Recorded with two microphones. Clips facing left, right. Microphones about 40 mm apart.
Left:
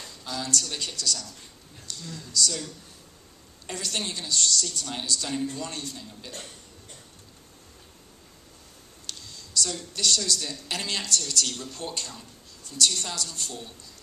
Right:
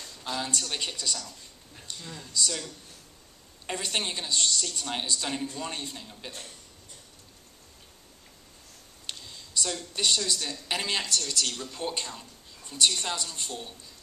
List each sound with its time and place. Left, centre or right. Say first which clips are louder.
0.2 s a woman's voice: left 1 dB; right
3.6 s a woman's voice: right 1 dB; right
9.0 s a sound: right 1 dB; centre
9.9 s a woman's voice: left 1 dB; right
10.4 s speech: right 1 dB; centre